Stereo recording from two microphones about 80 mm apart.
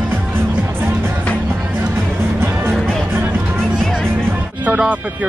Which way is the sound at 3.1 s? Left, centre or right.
Right.